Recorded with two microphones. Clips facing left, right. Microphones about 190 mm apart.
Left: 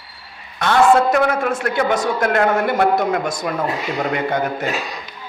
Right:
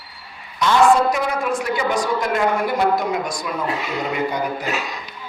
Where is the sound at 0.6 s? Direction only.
60° left (ahead or behind).